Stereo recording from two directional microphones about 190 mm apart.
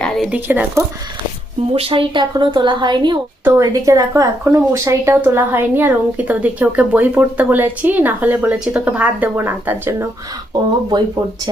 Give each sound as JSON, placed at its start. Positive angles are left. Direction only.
{"t": 0.0, "sound": "speech", "side_deg": -5}
{"t": 1.7, "sound": "a woman's voice", "side_deg": -30}